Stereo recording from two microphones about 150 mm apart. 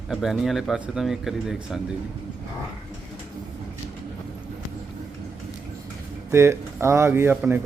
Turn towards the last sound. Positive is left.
turn(degrees=-10)  # may be behind; listen again after turning